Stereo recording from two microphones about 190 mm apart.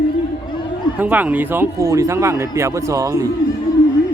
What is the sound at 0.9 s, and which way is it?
Speech, 10° right (ahead or behind).